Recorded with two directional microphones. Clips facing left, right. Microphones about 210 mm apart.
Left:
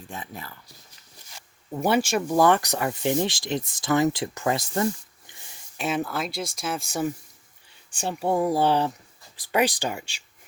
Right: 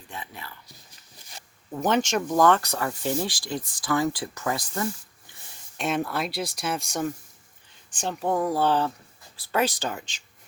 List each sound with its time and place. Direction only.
0.1 s speech: 45° left (ahead or behind)
1.7 s speech: 10° left (ahead or behind); by 4.9 s 25° left (ahead or behind)
5.7 s speech: 5° left (ahead or behind)